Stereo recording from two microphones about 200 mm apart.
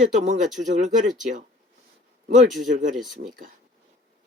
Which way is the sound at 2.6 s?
40° right (ahead or behind).